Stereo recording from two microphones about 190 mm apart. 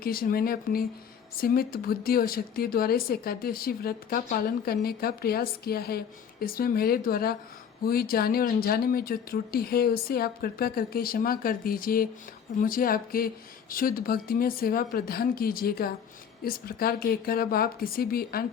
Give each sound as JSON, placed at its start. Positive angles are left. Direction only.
{"t": 0.0, "sound": "a woman's voice", "side_deg": 50}